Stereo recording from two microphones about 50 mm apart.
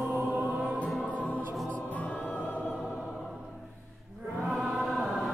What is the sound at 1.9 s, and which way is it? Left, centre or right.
Choir, left.